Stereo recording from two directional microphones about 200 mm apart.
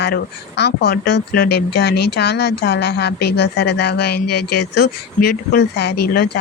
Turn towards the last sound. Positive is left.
turn(degrees=55)  # may be behind; listen again after turning